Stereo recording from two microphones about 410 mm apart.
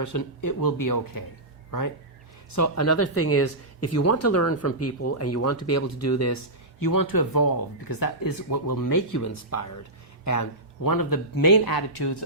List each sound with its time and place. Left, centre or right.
0.0 s speech: left
2.5 s speech: left